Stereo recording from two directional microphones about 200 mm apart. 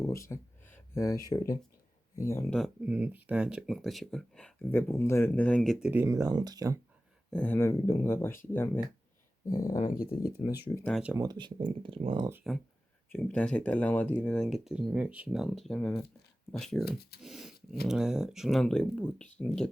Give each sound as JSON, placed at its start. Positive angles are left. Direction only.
{"t": 0.0, "sound": "speech", "side_deg": 15}
{"t": 2.6, "sound": "speech", "side_deg": -5}
{"t": 5.9, "sound": "speech", "side_deg": -15}
{"t": 7.3, "sound": "speech", "side_deg": 5}
{"t": 9.7, "sound": "speech", "side_deg": 40}
{"t": 10.8, "sound": "speech", "side_deg": 5}
{"t": 11.0, "sound": "speech", "side_deg": -15}
{"t": 13.1, "sound": "speech", "side_deg": 10}
{"t": 17.2, "sound": "dog", "side_deg": 0}
{"t": 17.8, "sound": "speech", "side_deg": -5}